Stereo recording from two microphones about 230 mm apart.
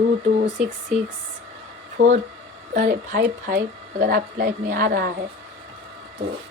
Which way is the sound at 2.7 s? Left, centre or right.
Right.